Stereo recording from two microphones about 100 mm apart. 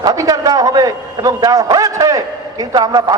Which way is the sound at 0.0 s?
35° right (ahead or behind).